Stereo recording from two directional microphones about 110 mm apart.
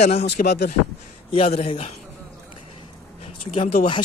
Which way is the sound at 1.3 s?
65° left (ahead or behind).